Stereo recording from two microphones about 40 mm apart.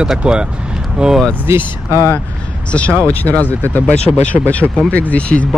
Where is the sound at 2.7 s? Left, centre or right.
Left.